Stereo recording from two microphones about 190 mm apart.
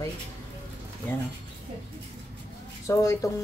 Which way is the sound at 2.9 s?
15° left (ahead or behind).